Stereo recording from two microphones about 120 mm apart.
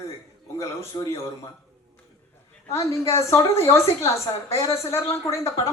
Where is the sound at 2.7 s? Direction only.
25° left (ahead or behind).